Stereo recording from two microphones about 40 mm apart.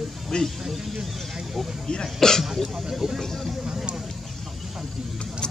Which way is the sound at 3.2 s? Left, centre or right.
Centre.